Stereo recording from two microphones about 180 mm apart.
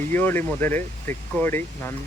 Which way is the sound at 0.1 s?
10° left (ahead or behind).